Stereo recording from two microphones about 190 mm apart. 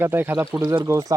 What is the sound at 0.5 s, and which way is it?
Speech, 25° right (ahead or behind).